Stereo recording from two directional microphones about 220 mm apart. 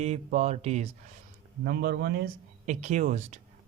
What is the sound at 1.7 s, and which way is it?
Speech, 45° right (ahead or behind).